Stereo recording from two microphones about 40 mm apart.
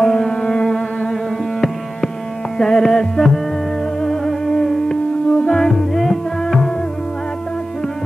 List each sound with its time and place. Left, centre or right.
0.0 s music: centre
2.5 s music: centre
5.9 s music: centre